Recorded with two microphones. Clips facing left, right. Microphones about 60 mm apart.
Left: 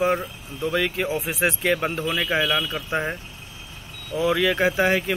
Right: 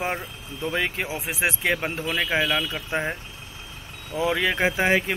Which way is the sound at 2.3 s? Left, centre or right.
Right.